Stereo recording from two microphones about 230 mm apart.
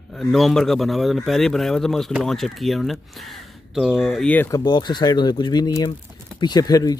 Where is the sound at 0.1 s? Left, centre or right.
Centre.